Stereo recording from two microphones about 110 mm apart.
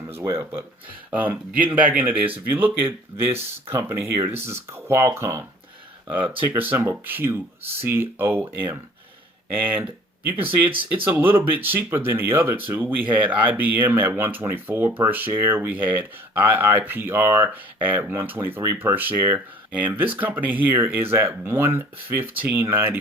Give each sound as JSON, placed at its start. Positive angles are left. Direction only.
{"t": 0.2, "sound": "speech", "side_deg": -25}
{"t": 10.4, "sound": "speech", "side_deg": -55}
{"t": 11.0, "sound": "speech", "side_deg": -20}